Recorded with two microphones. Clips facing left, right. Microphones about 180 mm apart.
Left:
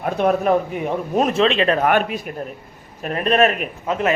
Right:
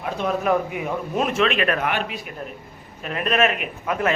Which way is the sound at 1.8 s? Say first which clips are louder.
Left 7 dB; 50° left (ahead or behind).